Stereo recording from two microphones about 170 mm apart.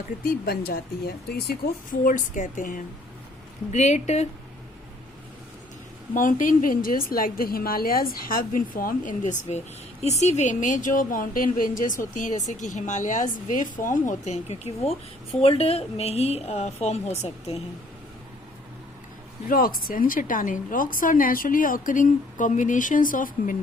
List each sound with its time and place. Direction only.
0.3 s speech: 60° left (ahead or behind)
1.9 s a woman's voice: 50° left (ahead or behind)
6.4 s a woman's voice: 50° left (ahead or behind)
19.5 s a woman's voice: 55° left (ahead or behind)